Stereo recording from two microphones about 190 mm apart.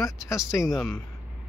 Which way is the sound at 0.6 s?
Centre (ahead or behind).